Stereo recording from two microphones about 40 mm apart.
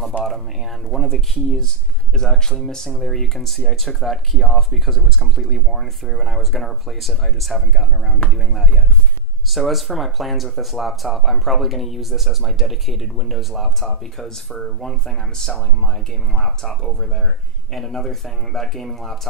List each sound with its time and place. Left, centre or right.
0.8 s speech: centre
14.8 s speech: centre